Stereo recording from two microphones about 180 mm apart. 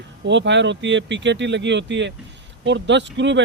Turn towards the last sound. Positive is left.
turn(degrees=-80)